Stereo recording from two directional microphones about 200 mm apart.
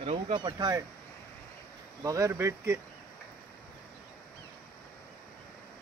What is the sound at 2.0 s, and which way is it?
Speech, 15° right (ahead or behind).